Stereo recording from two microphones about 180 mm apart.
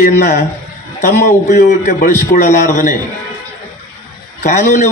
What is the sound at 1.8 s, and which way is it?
Speech, 45° left (ahead or behind).